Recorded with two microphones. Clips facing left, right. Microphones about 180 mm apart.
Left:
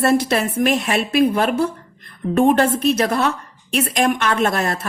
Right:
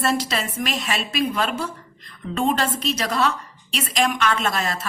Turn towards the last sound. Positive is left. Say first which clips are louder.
# left 5 dB
turn(degrees=55)  # may be behind; listen again after turning